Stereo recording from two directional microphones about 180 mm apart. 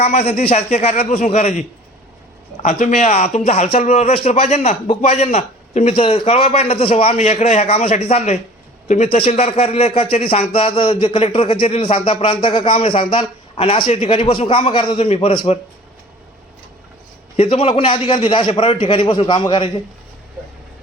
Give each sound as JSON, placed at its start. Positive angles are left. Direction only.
{"t": 0.0, "sound": "speech", "side_deg": 35}
{"t": 2.6, "sound": "speech", "side_deg": 40}
{"t": 17.3, "sound": "a man's voice", "side_deg": 30}